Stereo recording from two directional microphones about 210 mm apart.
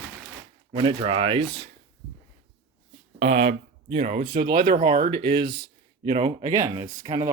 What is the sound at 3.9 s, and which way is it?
Speech, 30° right (ahead or behind).